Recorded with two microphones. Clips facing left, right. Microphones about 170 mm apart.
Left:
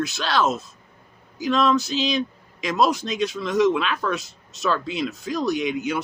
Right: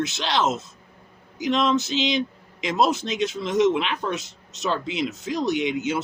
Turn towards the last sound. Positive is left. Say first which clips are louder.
# even
turn(degrees=-25)  # may be behind; listen again after turning